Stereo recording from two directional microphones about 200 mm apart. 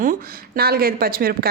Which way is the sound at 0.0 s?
45° right (ahead or behind).